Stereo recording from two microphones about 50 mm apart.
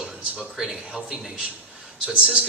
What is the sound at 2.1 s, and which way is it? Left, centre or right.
Speech, right.